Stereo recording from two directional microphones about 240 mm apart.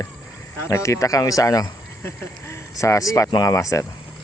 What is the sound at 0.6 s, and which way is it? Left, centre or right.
Speech, centre.